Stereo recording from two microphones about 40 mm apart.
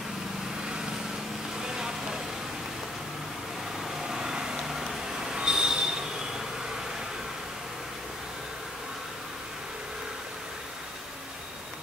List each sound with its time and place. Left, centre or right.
1.7 s vehicle: centre
4.1 s train: centre